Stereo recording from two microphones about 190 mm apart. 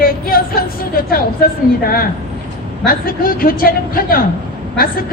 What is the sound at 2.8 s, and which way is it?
A man's voice, 50° left (ahead or behind).